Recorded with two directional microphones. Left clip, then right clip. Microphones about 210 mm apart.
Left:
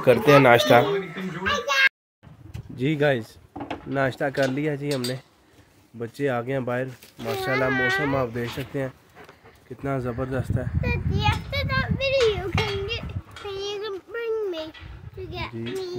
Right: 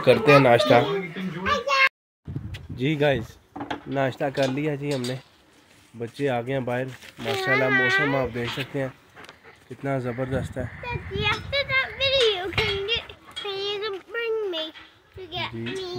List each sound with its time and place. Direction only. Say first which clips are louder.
0.0 s speech: even; centre (ahead or behind)
1.4 s a sound: right 1 dB; centre (ahead or behind)
2.7 s speech: even; centre (ahead or behind)
7.7 s speech: right 2 dB; 30° left (ahead or behind)
8.1 s speech: even; 15° right (ahead or behind)
10.8 s a child's voice: left 2 dB; 45° left (ahead or behind)
11.5 s a sound: right 3 dB; 30° left (ahead or behind)
11.8 s children playing: left 2 dB; 15° left (ahead or behind)